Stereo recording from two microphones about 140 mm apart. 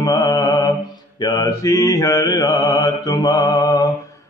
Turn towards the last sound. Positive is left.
turn(degrees=30)  # may be behind; listen again after turning